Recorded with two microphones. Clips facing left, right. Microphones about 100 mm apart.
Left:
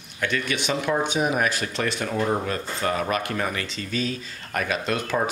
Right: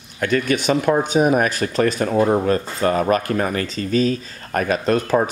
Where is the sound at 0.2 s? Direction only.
45° right (ahead or behind).